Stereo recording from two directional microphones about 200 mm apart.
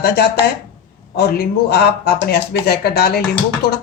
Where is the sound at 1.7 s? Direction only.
50° left (ahead or behind).